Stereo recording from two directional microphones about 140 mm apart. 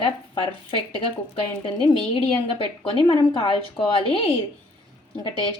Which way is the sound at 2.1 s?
40° left (ahead or behind).